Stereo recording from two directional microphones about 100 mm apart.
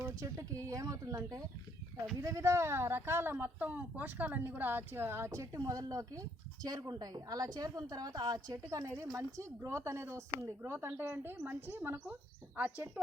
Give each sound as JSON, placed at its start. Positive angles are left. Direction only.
{"t": 0.0, "sound": "speech", "side_deg": -30}
{"t": 8.5, "sound": "speech", "side_deg": -30}